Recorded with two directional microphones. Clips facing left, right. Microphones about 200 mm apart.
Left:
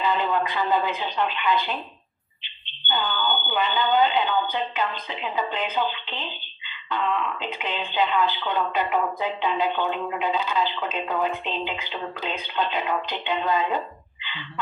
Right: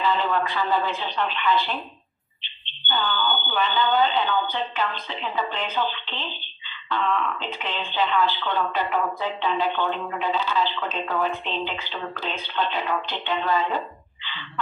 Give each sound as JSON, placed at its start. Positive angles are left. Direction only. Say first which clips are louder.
{"t": 0.0, "sound": "speech", "louder": "even", "side_deg": 15}